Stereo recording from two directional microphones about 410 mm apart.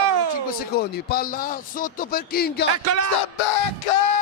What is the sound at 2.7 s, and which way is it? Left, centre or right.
Speech, right.